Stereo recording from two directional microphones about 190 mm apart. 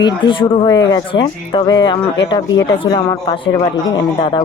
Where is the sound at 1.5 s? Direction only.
25° left (ahead or behind).